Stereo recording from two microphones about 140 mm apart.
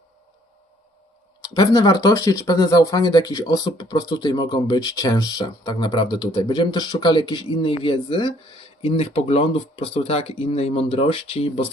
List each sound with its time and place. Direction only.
1.4 s speech: 30° left (ahead or behind); by 11.6 s 45° left (ahead or behind)